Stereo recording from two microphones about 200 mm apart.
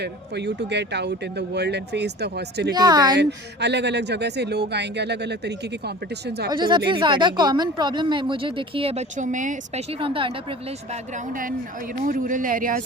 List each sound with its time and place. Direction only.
0.0 s speech: 55° right (ahead or behind)
2.7 s speech: 20° right (ahead or behind)
3.2 s speech: 60° right (ahead or behind)
6.5 s speech: 20° right (ahead or behind); by 9.8 s 40° right (ahead or behind)
10.0 s speech: 25° right (ahead or behind)
12.0 s speech: 40° right (ahead or behind)